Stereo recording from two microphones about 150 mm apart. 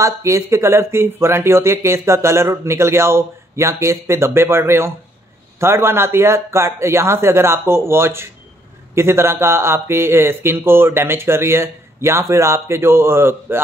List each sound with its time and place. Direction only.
0.0 s speech: 20° right (ahead or behind)